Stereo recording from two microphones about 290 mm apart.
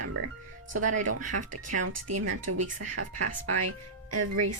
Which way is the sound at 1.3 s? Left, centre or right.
Right.